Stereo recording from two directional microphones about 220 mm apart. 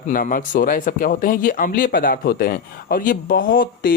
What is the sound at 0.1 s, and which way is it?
Speech, 40° left (ahead or behind).